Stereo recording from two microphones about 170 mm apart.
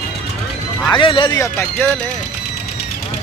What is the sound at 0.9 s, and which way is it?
Speech, 30° left (ahead or behind).